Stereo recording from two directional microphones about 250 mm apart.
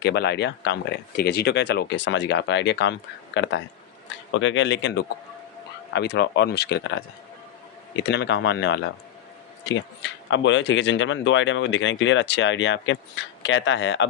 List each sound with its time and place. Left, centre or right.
0.0 s speech: left
8.0 s speech: left